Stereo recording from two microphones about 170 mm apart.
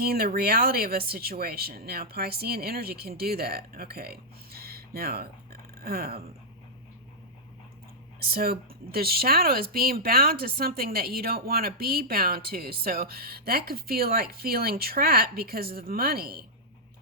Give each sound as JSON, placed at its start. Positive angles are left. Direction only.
{"t": 0.0, "sound": "speech", "side_deg": -65}
{"t": 8.2, "sound": "speech", "side_deg": -65}